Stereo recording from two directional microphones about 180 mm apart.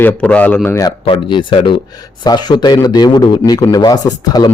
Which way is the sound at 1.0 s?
30° left (ahead or behind).